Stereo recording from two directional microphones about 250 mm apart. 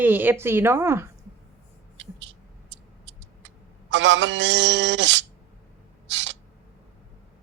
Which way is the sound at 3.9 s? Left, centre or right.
Right.